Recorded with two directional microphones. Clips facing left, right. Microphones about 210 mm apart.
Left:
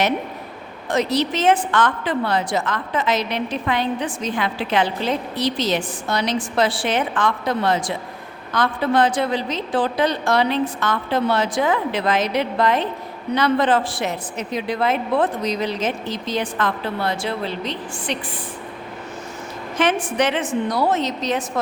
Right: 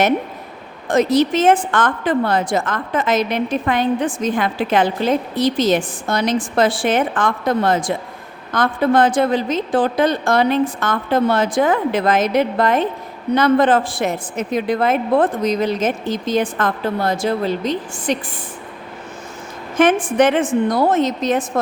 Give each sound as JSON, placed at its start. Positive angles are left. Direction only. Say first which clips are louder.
{"t": 0.9, "sound": "a woman's voice", "louder": "right 5 dB", "side_deg": -50}
{"t": 19.7, "sound": "a woman's voice", "louder": "right 6 dB", "side_deg": -50}